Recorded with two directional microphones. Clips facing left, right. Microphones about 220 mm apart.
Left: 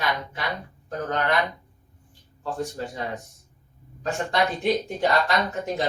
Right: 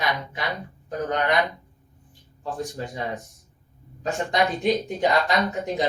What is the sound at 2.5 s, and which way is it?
Speech, 15° right (ahead or behind).